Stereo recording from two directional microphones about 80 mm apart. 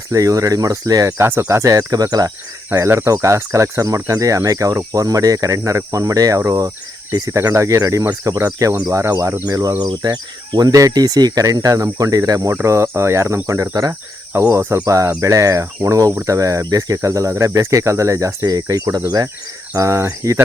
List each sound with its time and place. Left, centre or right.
0.1 s speech: right
1.2 s cricket: right
1.5 s speech: right
2.7 s cricket: right
4.1 s speech: right
6.4 s cricket: right
9.5 s speech: right
9.8 s speech: right
12.6 s cricket: right
14.3 s cricket: right
14.8 s cricket: right
15.2 s speech: right
18.4 s speech: right
19.7 s cricket: right